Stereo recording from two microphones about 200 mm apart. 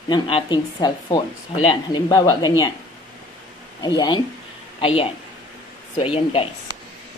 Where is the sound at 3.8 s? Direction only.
20° left (ahead or behind).